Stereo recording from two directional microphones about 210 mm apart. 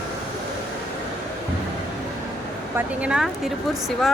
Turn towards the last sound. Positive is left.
turn(degrees=-5)  # may be behind; listen again after turning